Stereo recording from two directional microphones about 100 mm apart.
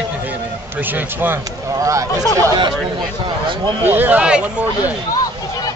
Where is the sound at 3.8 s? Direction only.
20° right (ahead or behind).